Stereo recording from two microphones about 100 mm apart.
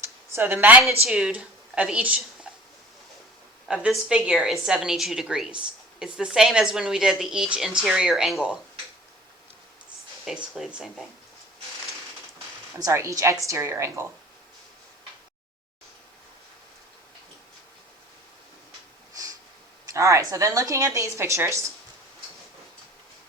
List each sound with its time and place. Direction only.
0.0 s a sound: 25° right (ahead or behind)
1.0 s speech: 10° right (ahead or behind)
3.7 s a woman's voice: 10° right (ahead or behind)
10.2 s a woman's voice: 5° right (ahead or behind)
12.8 s a woman's voice: 30° right (ahead or behind)
19.1 s snort: 35° right (ahead or behind)
19.9 s a woman's voice: 30° right (ahead or behind)